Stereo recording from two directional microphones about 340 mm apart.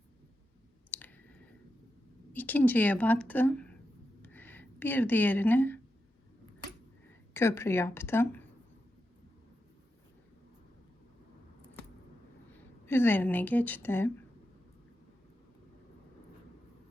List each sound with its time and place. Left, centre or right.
0.9 s clicking: centre
2.3 s speech: centre
4.2 s a sound: centre
7.3 s a woman's voice: centre
12.8 s speech: centre